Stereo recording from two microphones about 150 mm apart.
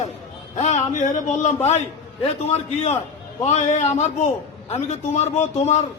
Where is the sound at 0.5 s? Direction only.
50° left (ahead or behind).